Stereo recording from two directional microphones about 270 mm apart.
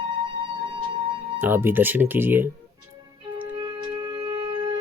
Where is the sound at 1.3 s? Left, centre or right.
Centre.